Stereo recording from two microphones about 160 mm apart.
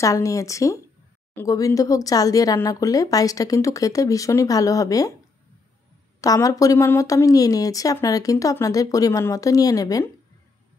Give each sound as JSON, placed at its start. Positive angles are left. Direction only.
{"t": 0.0, "sound": "speech", "side_deg": 20}
{"t": 6.2, "sound": "speech", "side_deg": 20}